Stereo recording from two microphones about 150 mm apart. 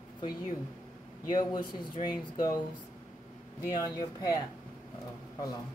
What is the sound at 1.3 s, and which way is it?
Speech, 25° left (ahead or behind).